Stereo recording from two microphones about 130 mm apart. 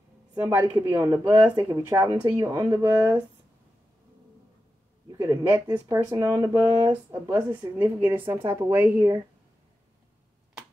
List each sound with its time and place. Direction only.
0.4 s a woman's voice: 15° right (ahead or behind)
5.1 s speech: 20° right (ahead or behind)
7.8 s a woman's voice: 15° right (ahead or behind)